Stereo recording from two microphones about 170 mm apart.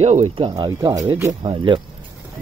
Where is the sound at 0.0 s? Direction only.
40° right (ahead or behind).